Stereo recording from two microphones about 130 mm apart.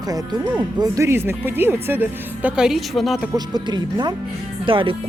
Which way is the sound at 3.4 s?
35° right (ahead or behind).